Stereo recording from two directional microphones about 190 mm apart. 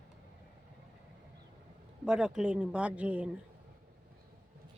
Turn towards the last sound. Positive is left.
turn(degrees=-5)  # may be behind; listen again after turning